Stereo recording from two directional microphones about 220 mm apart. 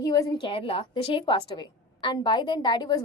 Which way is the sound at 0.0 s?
15° left (ahead or behind).